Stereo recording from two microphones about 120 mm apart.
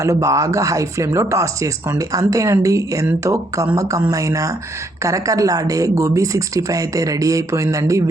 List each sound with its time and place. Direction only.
0.0 s speech: 25° right (ahead or behind)